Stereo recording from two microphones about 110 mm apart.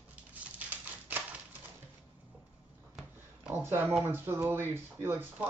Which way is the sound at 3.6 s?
20° right (ahead or behind).